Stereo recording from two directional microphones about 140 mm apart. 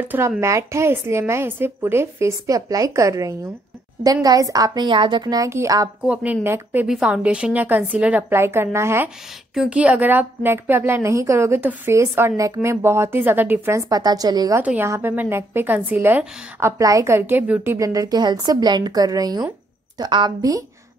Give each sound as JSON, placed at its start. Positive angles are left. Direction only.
{"t": 0.4, "sound": "a woman's voice", "side_deg": -20}
{"t": 6.0, "sound": "a woman's voice", "side_deg": -10}
{"t": 9.5, "sound": "a woman's voice", "side_deg": -5}
{"t": 14.6, "sound": "a woman's voice", "side_deg": -10}
{"t": 17.7, "sound": "a woman's voice", "side_deg": -25}